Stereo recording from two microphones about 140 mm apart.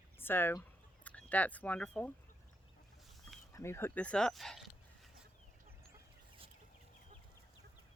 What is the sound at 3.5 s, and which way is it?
Speech, 20° left (ahead or behind).